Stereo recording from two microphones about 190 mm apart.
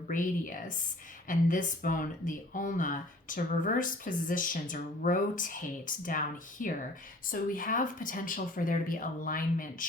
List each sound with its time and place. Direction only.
0.1 s speech: 45° left (ahead or behind)